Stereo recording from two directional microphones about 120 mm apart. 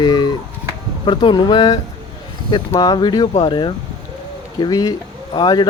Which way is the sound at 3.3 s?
50° left (ahead or behind).